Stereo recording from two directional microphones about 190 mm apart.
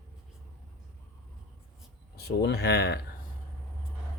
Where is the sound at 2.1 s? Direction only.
60° left (ahead or behind).